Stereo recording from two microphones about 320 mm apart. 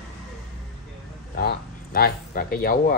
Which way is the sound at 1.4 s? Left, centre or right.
Left.